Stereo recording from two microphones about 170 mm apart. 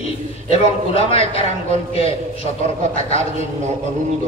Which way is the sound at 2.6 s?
45° right (ahead or behind).